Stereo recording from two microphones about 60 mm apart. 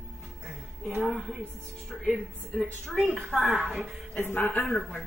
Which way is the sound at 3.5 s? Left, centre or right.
Centre.